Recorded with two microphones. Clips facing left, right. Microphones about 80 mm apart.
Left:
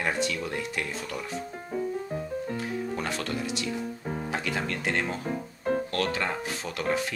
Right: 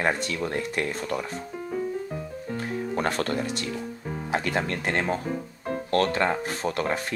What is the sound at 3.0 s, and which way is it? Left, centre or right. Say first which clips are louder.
Speech: right 5 dB; right.